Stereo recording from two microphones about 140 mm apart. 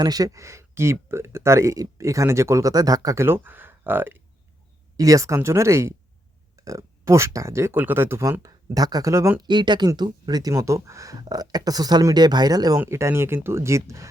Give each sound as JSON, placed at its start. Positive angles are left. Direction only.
{"t": 0.0, "sound": "speech", "side_deg": -25}
{"t": 9.5, "sound": "speech", "side_deg": -35}